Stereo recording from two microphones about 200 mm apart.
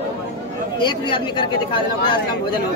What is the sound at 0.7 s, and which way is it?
Speech, 25° left (ahead or behind).